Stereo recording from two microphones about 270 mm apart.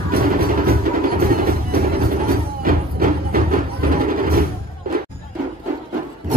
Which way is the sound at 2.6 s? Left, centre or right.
Right.